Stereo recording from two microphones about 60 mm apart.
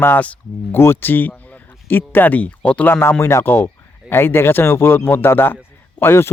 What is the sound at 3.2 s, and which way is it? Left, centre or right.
Speech, left.